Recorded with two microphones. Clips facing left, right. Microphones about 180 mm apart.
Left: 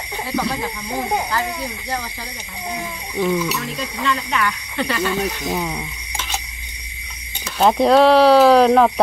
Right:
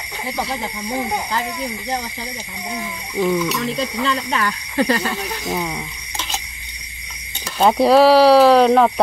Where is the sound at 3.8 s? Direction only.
30° right (ahead or behind).